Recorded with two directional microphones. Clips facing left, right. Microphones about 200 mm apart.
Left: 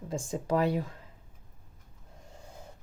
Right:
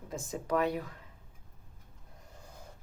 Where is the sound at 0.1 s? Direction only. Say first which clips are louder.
Left 3 dB; 30° left (ahead or behind).